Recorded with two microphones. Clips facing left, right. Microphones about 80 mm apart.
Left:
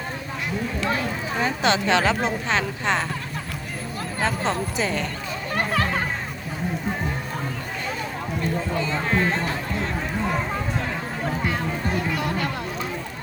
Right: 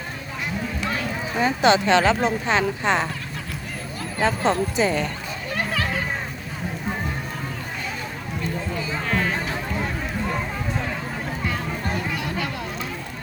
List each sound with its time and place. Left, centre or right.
1.4 s speech: centre
4.2 s speech: centre
5.5 s music: left
9.0 s run: left